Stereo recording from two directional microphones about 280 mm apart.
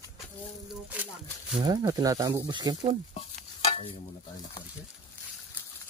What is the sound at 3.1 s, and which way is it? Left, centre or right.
Stir, left.